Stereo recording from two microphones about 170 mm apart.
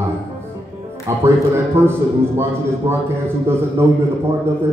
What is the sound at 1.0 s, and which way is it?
A man's voice, 15° right (ahead or behind).